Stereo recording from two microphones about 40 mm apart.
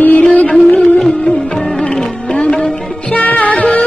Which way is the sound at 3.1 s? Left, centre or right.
Left.